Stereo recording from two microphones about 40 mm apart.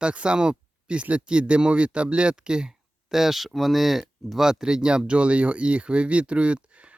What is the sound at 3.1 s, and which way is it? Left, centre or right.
Speech, centre.